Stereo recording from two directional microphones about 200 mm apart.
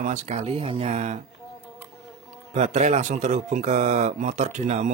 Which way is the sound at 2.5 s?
35° right (ahead or behind).